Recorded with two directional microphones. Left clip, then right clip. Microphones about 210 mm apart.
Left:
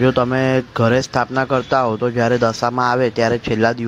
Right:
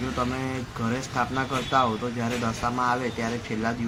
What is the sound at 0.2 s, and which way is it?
A man's voice, 40° left (ahead or behind).